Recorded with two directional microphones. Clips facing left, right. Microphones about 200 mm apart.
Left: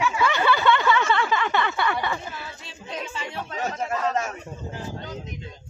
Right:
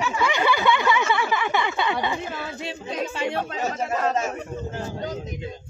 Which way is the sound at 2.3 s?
70° right (ahead or behind).